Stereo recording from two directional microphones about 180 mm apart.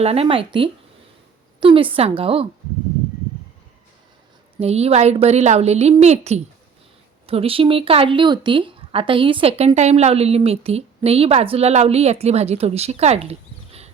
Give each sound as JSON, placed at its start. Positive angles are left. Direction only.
{"t": 0.0, "sound": "speech", "side_deg": -35}
{"t": 4.5, "sound": "speech", "side_deg": -35}